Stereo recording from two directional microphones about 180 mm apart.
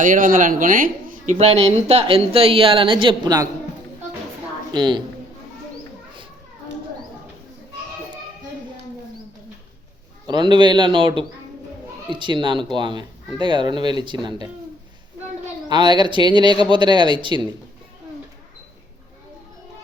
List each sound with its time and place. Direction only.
0.0 s speech: 50° right (ahead or behind)
1.4 s a woman's voice: 35° right (ahead or behind)
4.7 s speech: 25° right (ahead or behind)
10.2 s speech: 25° right (ahead or behind)
15.7 s speech: 25° right (ahead or behind)